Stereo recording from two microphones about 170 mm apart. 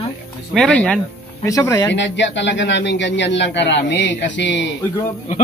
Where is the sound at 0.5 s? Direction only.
5° left (ahead or behind).